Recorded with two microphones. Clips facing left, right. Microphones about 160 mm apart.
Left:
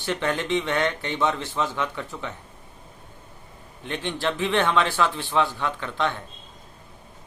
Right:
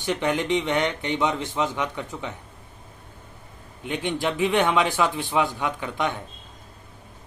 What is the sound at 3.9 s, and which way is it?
A man's voice, 15° right (ahead or behind).